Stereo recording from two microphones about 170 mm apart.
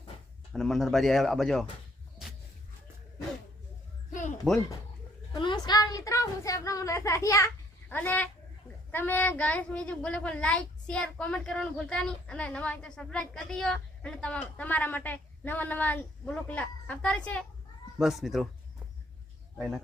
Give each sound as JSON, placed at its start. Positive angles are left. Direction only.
{"t": 0.5, "sound": "speech", "side_deg": 0}
{"t": 4.5, "sound": "speech", "side_deg": 0}
{"t": 5.3, "sound": "a woman's voice", "side_deg": 25}